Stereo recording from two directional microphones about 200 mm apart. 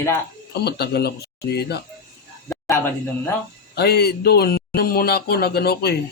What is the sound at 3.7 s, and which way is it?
Speech, 55° left (ahead or behind).